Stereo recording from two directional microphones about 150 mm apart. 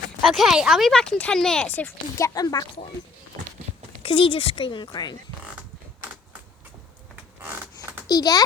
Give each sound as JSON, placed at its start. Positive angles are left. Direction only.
{"t": 0.2, "sound": "speech", "side_deg": 0}
{"t": 4.0, "sound": "speech", "side_deg": 40}
{"t": 8.0, "sound": "a child's voice", "side_deg": 25}